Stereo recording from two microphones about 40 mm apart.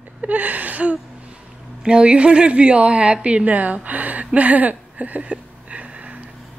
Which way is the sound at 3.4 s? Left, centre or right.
Right.